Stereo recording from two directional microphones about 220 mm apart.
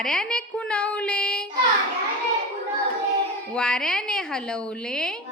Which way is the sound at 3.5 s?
5° left (ahead or behind).